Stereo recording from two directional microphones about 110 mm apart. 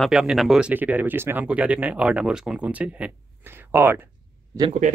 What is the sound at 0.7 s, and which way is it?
Speech, 15° right (ahead or behind).